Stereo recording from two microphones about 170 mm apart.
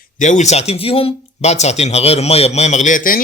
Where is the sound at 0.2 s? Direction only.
45° left (ahead or behind).